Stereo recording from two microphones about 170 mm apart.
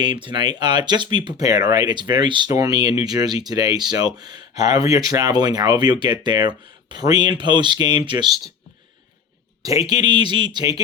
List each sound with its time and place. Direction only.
0.0 s speech: 25° right (ahead or behind)
9.8 s speech: 25° right (ahead or behind)